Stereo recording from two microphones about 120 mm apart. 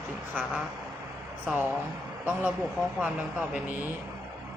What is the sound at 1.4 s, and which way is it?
Speech, 15° right (ahead or behind).